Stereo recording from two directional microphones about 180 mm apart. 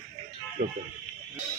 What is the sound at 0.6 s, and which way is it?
Speech, 45° right (ahead or behind).